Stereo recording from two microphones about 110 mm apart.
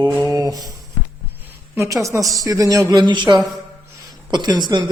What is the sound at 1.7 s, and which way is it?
A woman's voice, 30° right (ahead or behind).